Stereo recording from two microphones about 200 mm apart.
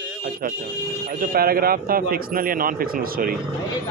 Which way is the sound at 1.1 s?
50° right (ahead or behind).